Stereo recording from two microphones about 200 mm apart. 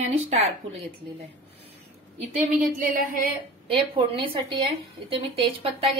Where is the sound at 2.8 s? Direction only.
45° right (ahead or behind).